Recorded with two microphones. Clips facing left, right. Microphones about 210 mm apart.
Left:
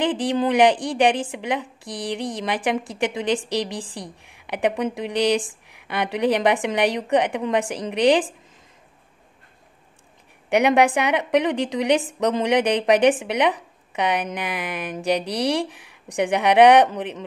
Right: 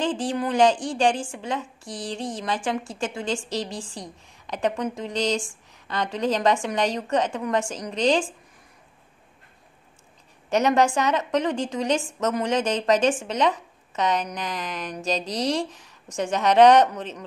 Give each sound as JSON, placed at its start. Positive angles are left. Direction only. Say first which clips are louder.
{"t": 0.0, "sound": "speech", "louder": "left 4 dB", "side_deg": 20}
{"t": 10.5, "sound": "speech", "louder": "left 3 dB", "side_deg": 15}